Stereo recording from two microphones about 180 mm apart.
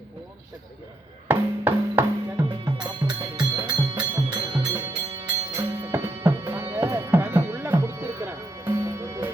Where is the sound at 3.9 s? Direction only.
10° right (ahead or behind).